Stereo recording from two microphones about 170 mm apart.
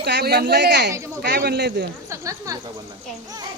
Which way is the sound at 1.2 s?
70° right (ahead or behind).